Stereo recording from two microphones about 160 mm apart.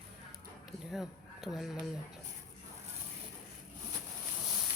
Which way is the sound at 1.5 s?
Centre (ahead or behind).